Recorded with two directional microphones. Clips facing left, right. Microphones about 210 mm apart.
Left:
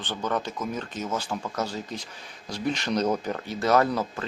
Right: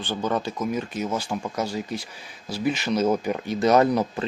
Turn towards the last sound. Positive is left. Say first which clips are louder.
# right 4 dB
turn(degrees=-20)  # may be behind; listen again after turning